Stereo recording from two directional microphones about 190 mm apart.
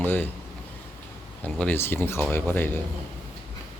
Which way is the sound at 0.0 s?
10° left (ahead or behind).